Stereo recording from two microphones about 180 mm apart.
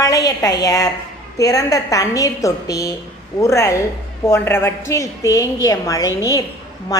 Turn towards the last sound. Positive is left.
turn(degrees=20)  # may be behind; listen again after turning